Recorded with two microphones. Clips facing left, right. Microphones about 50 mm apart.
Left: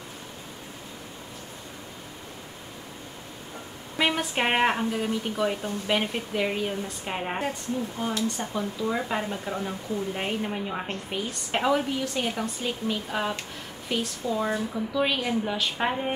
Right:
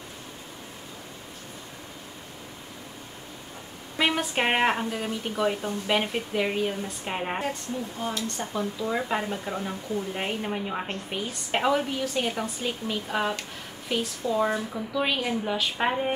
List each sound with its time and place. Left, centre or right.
4.0 s speech: centre